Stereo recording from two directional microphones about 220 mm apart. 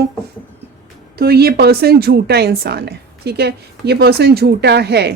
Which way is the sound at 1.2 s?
45° right (ahead or behind).